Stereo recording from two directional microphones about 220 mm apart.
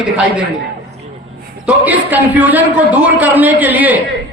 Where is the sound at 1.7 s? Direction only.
5° right (ahead or behind).